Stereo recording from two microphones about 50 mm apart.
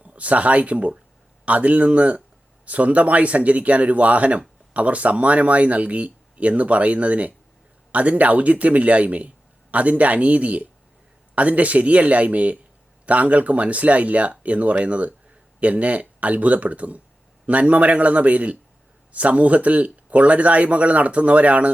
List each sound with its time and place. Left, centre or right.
0.0 s speech: right